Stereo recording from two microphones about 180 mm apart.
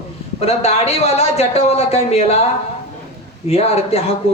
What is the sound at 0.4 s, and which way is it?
A man's voice, 35° left (ahead or behind).